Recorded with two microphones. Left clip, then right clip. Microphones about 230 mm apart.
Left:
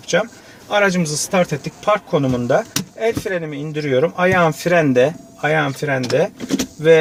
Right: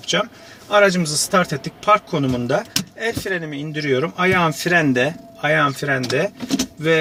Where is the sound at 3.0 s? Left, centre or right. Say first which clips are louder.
Left 5 dB; centre.